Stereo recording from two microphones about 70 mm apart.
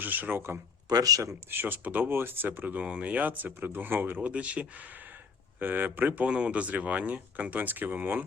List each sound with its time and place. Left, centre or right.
0.0 s speech: right
0.9 s speech: right
1.5 s speech: right
4.3 s speech: centre